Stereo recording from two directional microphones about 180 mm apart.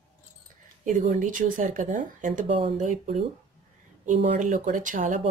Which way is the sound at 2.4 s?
30° right (ahead or behind).